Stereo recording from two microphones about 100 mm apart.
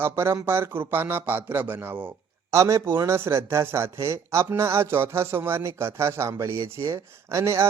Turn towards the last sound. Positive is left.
turn(degrees=-30)  # may be behind; listen again after turning